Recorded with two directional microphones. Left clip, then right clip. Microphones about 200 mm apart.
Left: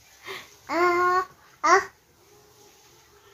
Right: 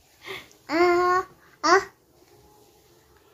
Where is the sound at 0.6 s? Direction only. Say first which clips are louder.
Right 1 dB; 25° right (ahead or behind).